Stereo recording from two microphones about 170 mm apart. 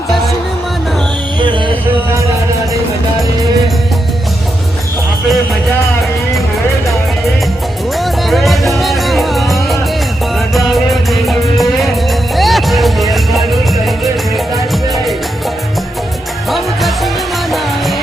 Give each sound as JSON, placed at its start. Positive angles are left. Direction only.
{"t": 1.4, "sound": "music", "side_deg": -30}
{"t": 7.9, "sound": "music", "side_deg": 0}
{"t": 16.5, "sound": "music", "side_deg": 0}